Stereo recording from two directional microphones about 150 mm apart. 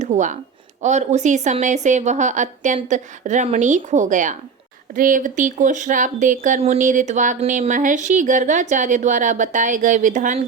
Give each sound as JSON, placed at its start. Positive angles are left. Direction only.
{"t": 0.1, "sound": "a woman's voice", "side_deg": -55}